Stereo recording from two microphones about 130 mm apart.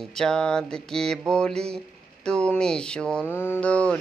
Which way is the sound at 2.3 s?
5° left (ahead or behind).